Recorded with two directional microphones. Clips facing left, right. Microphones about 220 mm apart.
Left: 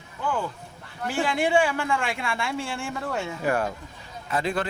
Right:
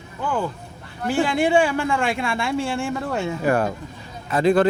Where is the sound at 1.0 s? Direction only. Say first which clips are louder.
Right 5 dB; 30° right (ahead or behind).